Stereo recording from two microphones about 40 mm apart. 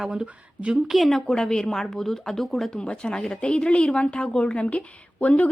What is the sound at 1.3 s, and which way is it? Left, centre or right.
Speech, centre.